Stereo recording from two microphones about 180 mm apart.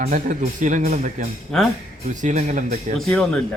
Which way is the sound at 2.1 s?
45° right (ahead or behind).